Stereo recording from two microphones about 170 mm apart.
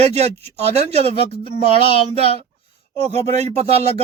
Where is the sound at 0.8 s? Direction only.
40° right (ahead or behind).